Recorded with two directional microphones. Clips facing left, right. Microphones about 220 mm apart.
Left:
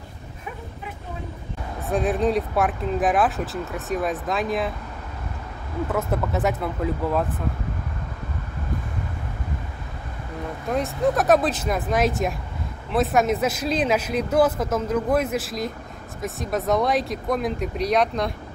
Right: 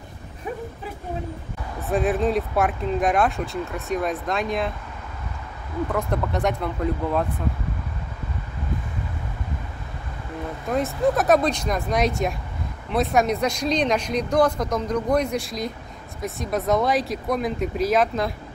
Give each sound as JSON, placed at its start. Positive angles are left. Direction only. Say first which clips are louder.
{"t": 1.9, "sound": "speech", "louder": "even", "side_deg": 0}
{"t": 5.9, "sound": "speech", "louder": "left 1 dB", "side_deg": 5}
{"t": 10.7, "sound": "speech", "louder": "right 1 dB", "side_deg": 0}